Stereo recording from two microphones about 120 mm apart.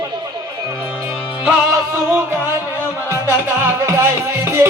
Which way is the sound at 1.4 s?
15° right (ahead or behind).